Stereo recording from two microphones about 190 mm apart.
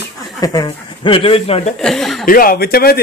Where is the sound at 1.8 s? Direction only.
Centre (ahead or behind).